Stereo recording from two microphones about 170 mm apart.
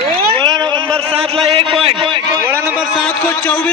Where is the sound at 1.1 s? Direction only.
35° right (ahead or behind).